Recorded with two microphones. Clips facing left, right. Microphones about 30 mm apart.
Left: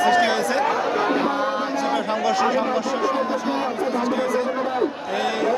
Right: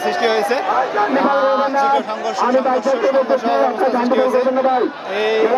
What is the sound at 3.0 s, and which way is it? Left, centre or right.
A man's voice, right.